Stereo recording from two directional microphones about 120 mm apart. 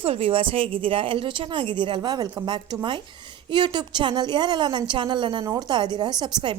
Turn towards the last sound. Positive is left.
turn(degrees=-40)  # may be behind; listen again after turning